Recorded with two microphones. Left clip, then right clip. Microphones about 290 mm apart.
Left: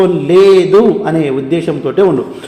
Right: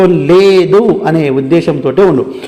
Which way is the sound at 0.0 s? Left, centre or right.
Right.